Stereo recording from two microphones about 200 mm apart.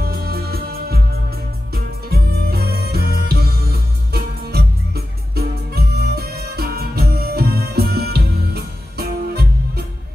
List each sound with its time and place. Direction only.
0.0 s music: 50° right (ahead or behind)